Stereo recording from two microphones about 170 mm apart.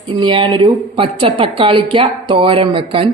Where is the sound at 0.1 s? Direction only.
25° right (ahead or behind).